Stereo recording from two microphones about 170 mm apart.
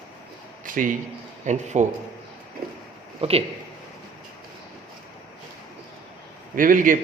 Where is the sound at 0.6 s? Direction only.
50° right (ahead or behind).